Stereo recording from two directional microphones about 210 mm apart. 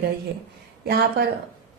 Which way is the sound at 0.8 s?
50° right (ahead or behind).